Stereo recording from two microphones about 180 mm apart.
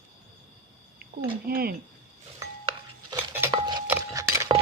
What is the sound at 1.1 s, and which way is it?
Speech, 55° right (ahead or behind).